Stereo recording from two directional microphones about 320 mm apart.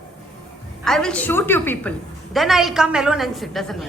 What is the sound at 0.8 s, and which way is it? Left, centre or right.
A woman's voice, centre.